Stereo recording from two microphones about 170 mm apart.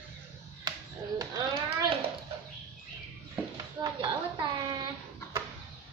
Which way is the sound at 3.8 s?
25° right (ahead or behind).